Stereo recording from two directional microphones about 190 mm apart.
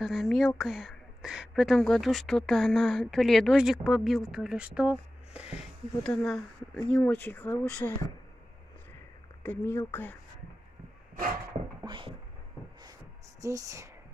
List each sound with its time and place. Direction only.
0.0 s a woman's voice: centre (ahead or behind); by 8.0 s 15° left (ahead or behind)
9.4 s speech: 10° left (ahead or behind)
11.8 s a sound: 25° right (ahead or behind)
13.4 s speech: 15° right (ahead or behind)